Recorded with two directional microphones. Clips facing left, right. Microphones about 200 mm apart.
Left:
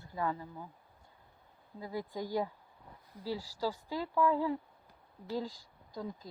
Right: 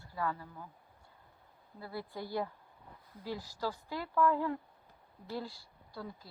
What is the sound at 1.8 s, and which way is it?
Speech, 15° left (ahead or behind).